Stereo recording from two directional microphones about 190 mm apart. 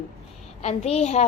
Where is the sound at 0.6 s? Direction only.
35° left (ahead or behind).